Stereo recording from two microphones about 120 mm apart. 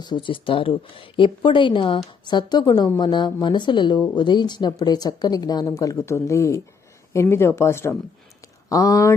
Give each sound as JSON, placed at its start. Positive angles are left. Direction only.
{"t": 0.0, "sound": "a woman's voice", "side_deg": 40}